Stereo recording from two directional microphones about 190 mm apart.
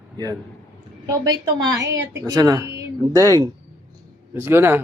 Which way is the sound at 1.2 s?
20° right (ahead or behind).